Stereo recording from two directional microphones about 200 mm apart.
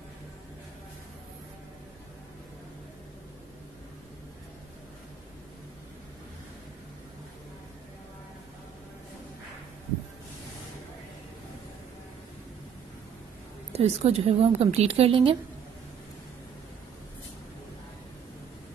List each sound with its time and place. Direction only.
13.7 s a woman's voice: 30° right (ahead or behind)